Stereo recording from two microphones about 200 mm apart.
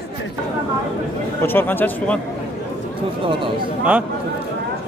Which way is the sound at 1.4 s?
10° left (ahead or behind).